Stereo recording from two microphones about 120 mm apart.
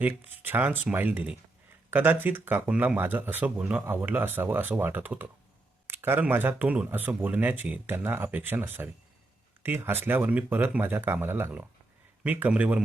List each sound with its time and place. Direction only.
0.0 s speech: 15° right (ahead or behind)